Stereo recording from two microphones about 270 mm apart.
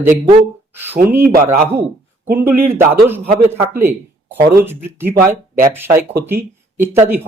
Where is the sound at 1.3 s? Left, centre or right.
Right.